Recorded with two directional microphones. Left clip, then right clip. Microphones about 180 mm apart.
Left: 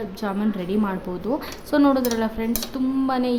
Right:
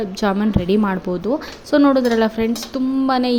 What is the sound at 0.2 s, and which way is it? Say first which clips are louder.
A woman's voice: right 7 dB; 25° right (ahead or behind).